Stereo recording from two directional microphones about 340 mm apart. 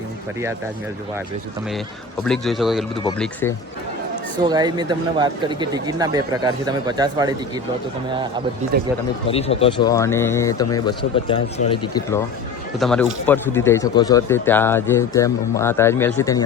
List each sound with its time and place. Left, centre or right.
2.2 s a man's voice: centre
4.4 s speech: centre
8.7 s speech: right
9.2 s a man's voice: centre